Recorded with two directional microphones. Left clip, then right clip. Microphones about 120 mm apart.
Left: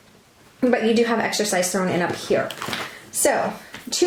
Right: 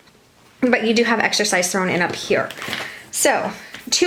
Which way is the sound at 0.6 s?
35° right (ahead or behind).